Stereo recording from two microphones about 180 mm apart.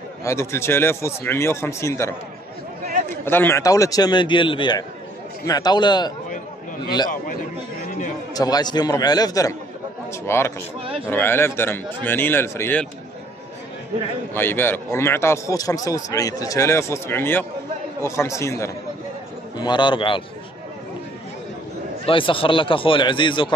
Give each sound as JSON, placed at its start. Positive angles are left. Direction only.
{"t": 0.2, "sound": "a man's voice", "side_deg": 15}
{"t": 8.4, "sound": "a man's voice", "side_deg": 20}
{"t": 14.3, "sound": "a man's voice", "side_deg": 10}
{"t": 22.0, "sound": "a man's voice", "side_deg": 30}